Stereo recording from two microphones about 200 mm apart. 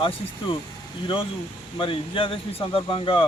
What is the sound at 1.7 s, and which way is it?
Speech, 25° left (ahead or behind).